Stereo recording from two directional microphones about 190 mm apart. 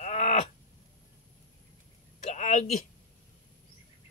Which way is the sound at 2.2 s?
40° left (ahead or behind).